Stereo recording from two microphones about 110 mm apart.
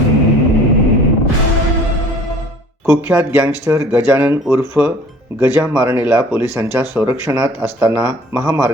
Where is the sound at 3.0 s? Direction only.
15° right (ahead or behind).